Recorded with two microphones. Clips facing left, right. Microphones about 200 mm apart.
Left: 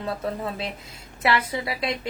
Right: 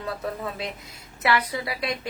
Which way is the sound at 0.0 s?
30° left (ahead or behind).